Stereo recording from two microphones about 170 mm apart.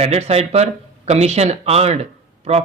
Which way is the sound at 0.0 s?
40° right (ahead or behind).